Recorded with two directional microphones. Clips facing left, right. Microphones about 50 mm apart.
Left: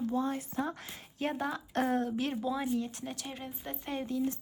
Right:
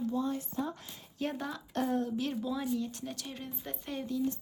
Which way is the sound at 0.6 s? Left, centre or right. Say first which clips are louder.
Left 2 dB; left.